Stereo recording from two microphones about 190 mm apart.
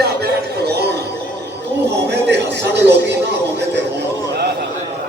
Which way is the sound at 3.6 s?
65° right (ahead or behind).